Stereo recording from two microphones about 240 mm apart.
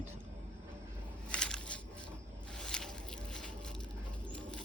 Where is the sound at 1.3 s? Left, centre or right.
Centre.